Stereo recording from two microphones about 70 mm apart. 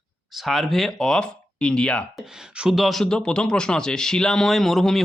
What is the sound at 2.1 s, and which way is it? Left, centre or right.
Speech, centre.